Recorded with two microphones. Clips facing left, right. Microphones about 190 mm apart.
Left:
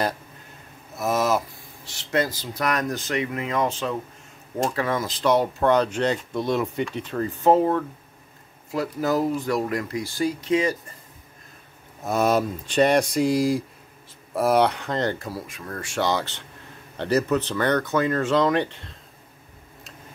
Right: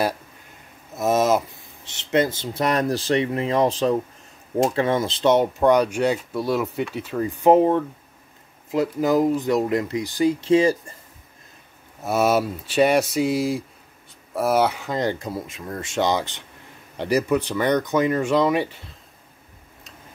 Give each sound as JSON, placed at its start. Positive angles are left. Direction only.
{"t": 0.9, "sound": "speech", "side_deg": -20}
{"t": 4.6, "sound": "speech", "side_deg": -25}
{"t": 10.4, "sound": "speech", "side_deg": -30}
{"t": 12.0, "sound": "speech", "side_deg": -5}